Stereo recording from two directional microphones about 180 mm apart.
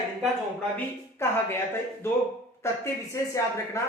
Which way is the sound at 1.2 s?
15° left (ahead or behind).